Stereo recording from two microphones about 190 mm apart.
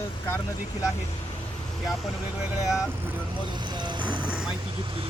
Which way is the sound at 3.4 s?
25° right (ahead or behind).